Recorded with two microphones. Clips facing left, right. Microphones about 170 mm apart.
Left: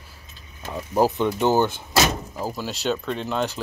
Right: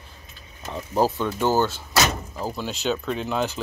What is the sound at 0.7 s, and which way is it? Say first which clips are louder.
Speech: left 2 dB; 10° left (ahead or behind).